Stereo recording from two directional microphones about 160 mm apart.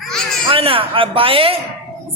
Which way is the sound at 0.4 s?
35° right (ahead or behind).